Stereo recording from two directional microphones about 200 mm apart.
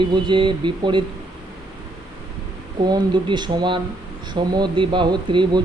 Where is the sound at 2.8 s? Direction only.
20° right (ahead or behind).